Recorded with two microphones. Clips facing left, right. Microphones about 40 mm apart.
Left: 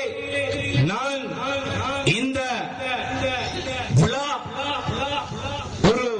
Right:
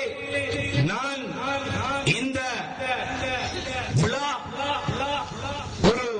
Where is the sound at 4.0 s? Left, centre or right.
Left.